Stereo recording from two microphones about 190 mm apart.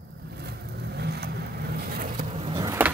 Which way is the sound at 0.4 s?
60° right (ahead or behind).